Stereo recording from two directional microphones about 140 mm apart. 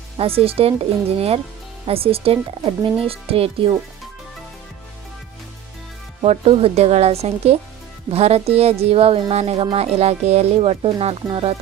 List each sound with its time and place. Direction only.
0.2 s speech: 45° right (ahead or behind)
6.2 s speech: 45° right (ahead or behind)